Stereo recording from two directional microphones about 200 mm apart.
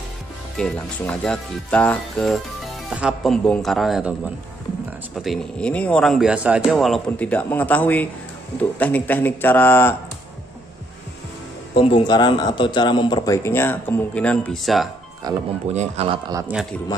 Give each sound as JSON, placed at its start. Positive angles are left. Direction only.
{"t": 0.6, "sound": "speech", "side_deg": 5}
{"t": 5.1, "sound": "a man's voice", "side_deg": 0}
{"t": 11.7, "sound": "a man's voice", "side_deg": 25}
{"t": 15.3, "sound": "speech", "side_deg": -20}
{"t": 15.7, "sound": "speech", "side_deg": -35}
{"t": 16.3, "sound": "speech", "side_deg": -15}